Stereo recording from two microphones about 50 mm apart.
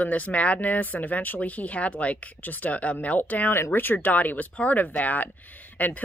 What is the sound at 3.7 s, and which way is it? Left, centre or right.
Speech, left.